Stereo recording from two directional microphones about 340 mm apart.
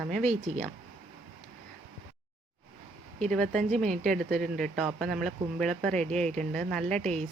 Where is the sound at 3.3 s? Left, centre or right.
Centre.